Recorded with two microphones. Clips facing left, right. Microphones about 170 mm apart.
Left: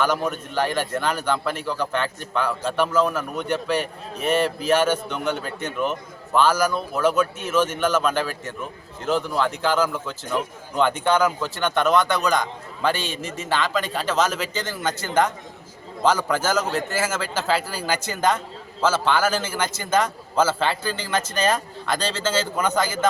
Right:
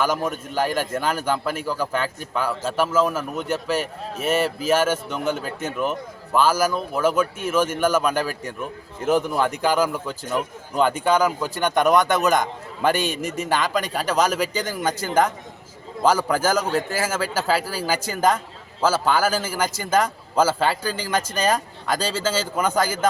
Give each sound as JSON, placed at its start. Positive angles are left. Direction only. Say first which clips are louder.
{"t": 0.0, "sound": "a man's voice", "louder": "even", "side_deg": -10}
{"t": 12.3, "sound": "a man's voice", "louder": "right 2 dB", "side_deg": -45}
{"t": 13.6, "sound": "a man's voice", "louder": "right 1 dB", "side_deg": -15}